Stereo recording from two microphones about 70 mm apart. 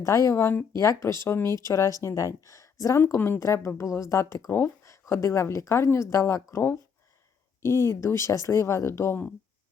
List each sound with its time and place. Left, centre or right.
0.0 s speech: left
3.2 s a woman's voice: left